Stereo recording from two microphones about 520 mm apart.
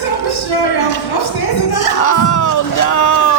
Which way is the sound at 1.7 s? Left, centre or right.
Left.